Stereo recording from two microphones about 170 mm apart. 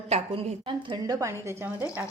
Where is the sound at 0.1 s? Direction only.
40° right (ahead or behind).